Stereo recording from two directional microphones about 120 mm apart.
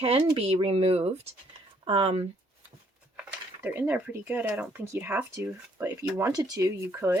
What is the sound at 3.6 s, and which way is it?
Speech, 15° right (ahead or behind).